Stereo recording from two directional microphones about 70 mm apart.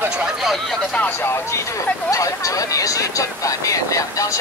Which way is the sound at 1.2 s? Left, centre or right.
Left.